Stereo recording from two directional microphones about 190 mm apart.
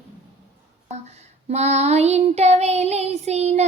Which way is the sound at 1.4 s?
35° right (ahead or behind).